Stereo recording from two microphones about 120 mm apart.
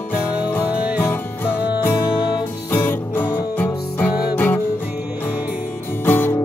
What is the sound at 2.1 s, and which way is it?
Music, 40° left (ahead or behind).